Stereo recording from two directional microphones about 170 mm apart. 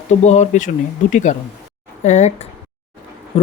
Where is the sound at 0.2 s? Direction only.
45° left (ahead or behind).